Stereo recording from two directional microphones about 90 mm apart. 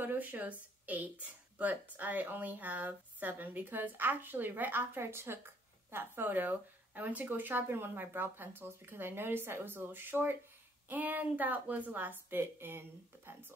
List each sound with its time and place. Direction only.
0.0 s speech: 20° right (ahead or behind)